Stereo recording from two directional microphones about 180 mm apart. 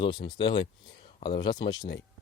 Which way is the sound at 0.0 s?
25° left (ahead or behind).